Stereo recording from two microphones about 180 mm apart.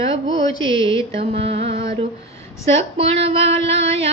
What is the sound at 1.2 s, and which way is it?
Female singing, 35° right (ahead or behind).